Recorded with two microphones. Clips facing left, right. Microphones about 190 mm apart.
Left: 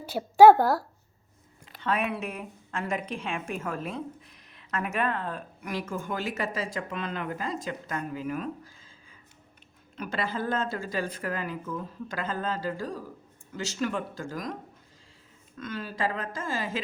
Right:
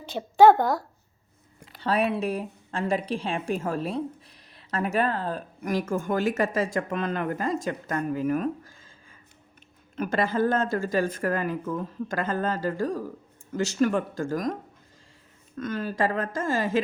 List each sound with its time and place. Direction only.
0.0 s a woman's voice: 10° left (ahead or behind)
1.8 s a woman's voice: 35° right (ahead or behind)
9.9 s speech: 50° right (ahead or behind)
15.5 s speech: 50° right (ahead or behind)